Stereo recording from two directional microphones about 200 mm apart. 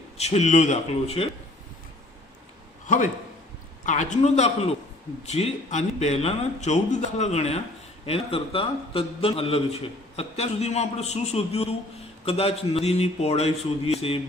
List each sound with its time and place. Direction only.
0.2 s a man's voice: 35° left (ahead or behind)
2.8 s a man's voice: 40° left (ahead or behind)